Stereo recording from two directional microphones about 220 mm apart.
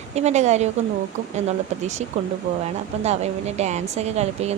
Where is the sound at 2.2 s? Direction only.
30° right (ahead or behind).